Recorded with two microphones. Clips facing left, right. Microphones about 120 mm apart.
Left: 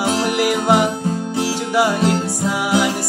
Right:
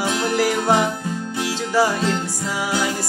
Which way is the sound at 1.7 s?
15° left (ahead or behind).